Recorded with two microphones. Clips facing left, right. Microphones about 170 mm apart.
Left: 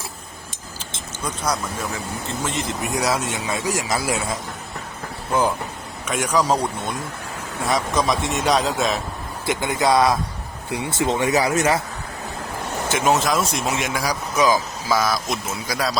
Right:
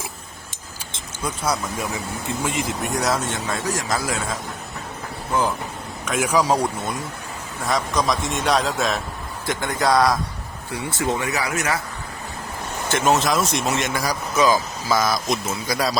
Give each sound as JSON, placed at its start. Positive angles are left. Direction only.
{"t": 2.4, "sound": "a man's voice", "side_deg": -10}
{"t": 2.8, "sound": "speech", "side_deg": 0}
{"t": 6.1, "sound": "a man's voice", "side_deg": -5}
{"t": 10.8, "sound": "speech", "side_deg": 20}
{"t": 12.9, "sound": "speech", "side_deg": 10}